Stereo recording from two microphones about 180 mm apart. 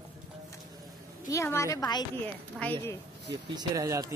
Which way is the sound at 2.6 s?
10° left (ahead or behind).